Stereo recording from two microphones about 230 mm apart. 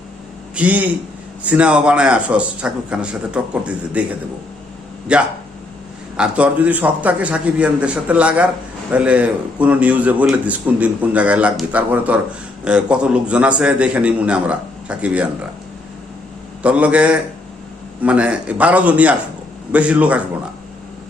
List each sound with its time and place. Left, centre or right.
0.5 s a man's voice: centre
16.6 s a man's voice: centre